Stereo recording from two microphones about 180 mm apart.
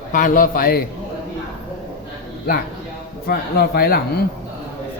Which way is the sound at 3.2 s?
60° left (ahead or behind).